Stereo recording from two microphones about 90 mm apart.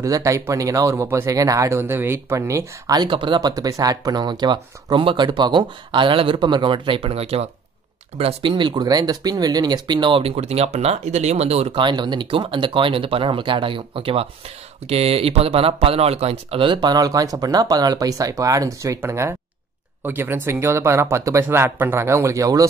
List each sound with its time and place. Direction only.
0.0 s speech: 35° right (ahead or behind)
3.1 s speech: 65° right (ahead or behind)
3.3 s speech: 45° right (ahead or behind); by 10.3 s 70° right (ahead or behind)
11.7 s speech: 60° right (ahead or behind); by 16.0 s 90° right
16.4 s speech: 75° right (ahead or behind); by 22.7 s 40° right (ahead or behind)